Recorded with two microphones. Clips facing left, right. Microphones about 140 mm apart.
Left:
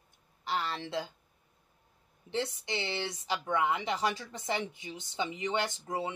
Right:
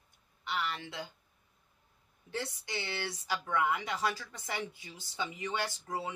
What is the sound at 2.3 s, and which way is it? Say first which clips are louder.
Speech: left 5 dB; 25° left (ahead or behind).